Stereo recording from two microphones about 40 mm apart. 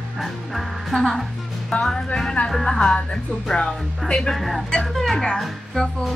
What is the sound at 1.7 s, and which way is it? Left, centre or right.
Speech, left.